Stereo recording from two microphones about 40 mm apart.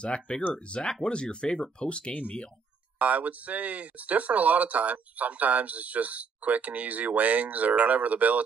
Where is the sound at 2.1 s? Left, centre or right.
Left.